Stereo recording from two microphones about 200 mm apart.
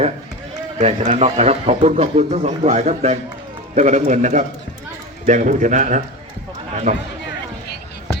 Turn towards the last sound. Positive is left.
turn(degrees=-40)  # may be behind; listen again after turning